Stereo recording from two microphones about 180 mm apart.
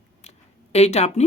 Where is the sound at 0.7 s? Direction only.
35° left (ahead or behind).